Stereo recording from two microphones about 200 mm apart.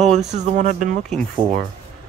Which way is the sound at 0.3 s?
35° right (ahead or behind).